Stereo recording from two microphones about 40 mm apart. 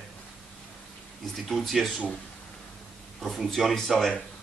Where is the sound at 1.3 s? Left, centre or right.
Centre.